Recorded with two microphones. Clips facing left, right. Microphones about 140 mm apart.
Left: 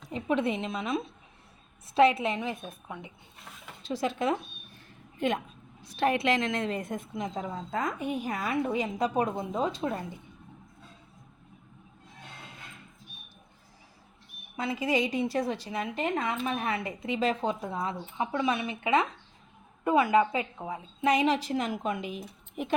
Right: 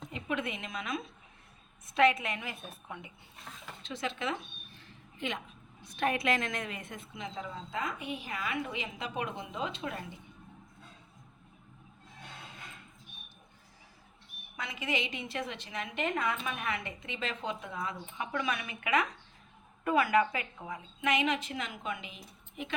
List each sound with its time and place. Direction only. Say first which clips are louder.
0.1 s a woman's voice: left 8 dB; 35° left (ahead or behind); by 3.1 s 15° left (ahead or behind)
3.8 s a woman's voice: left 7 dB; 40° left (ahead or behind)
5.1 s a woman's voice: left 9 dB; 50° left (ahead or behind)
6.0 s a woman's voice: left 4 dB; 30° left (ahead or behind)
14.5 s a woman's voice: left 8 dB; 30° left (ahead or behind); by 22.7 s 45° left (ahead or behind)